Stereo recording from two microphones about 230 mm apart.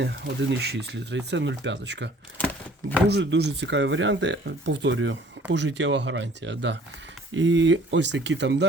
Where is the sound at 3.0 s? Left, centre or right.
Right.